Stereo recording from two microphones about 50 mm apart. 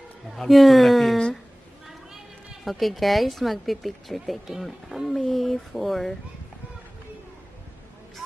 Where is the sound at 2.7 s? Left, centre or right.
Centre.